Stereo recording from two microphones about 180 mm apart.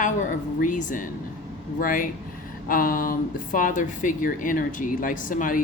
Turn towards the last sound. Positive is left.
turn(degrees=50)  # may be behind; listen again after turning